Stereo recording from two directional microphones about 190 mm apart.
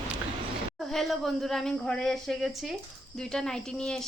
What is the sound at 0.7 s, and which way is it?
A woman's voice, centre (ahead or behind).